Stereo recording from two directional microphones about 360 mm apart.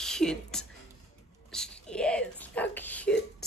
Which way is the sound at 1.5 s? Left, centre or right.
Centre.